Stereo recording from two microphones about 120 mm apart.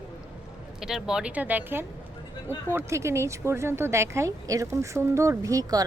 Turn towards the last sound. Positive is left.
turn(degrees=-30)  # may be behind; listen again after turning